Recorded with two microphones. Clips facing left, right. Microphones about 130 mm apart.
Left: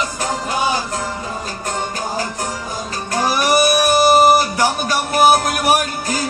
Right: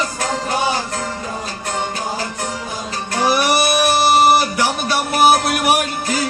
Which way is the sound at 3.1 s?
45° left (ahead or behind).